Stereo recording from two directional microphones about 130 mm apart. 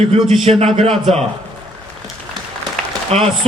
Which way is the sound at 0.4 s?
50° right (ahead or behind).